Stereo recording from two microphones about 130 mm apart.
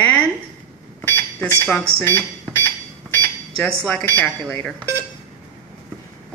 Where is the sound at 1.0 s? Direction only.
15° left (ahead or behind).